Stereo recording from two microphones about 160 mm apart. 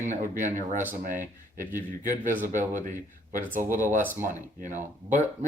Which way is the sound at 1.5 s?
55° right (ahead or behind).